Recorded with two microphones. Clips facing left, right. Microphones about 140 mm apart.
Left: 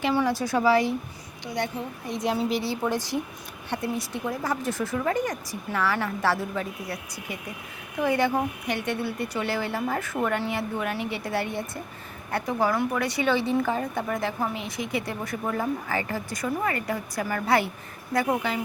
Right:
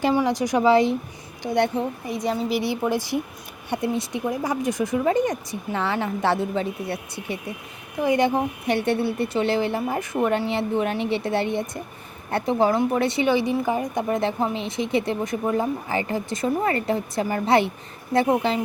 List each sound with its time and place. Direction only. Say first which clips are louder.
0.1 s a woman's voice: right 3 dB; 15° right (ahead or behind)
1.5 s a woman's voice: right 8 dB; 65° right (ahead or behind)
2.0 s speech: left 3 dB; centre (ahead or behind)
2.6 s a woman's voice: right 3 dB; 15° right (ahead or behind)
13.2 s a woman's voice: right 3 dB; 15° right (ahead or behind)